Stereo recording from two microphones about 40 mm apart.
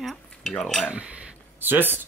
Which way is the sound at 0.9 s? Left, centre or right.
Right.